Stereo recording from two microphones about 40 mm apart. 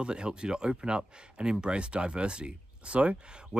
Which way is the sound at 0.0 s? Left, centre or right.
Right.